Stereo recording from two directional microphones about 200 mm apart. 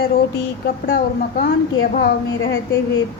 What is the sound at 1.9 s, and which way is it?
Speech, 50° left (ahead or behind).